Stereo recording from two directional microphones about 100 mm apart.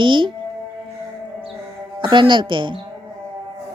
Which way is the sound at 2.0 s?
50° right (ahead or behind).